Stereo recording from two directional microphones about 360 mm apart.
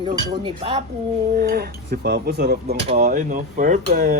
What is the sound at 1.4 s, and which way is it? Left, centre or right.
Speech, right.